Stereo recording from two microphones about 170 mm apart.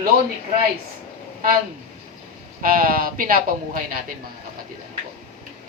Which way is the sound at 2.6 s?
55° right (ahead or behind).